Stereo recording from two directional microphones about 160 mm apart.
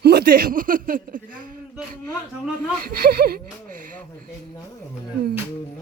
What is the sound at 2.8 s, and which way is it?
Speech, 70° right (ahead or behind).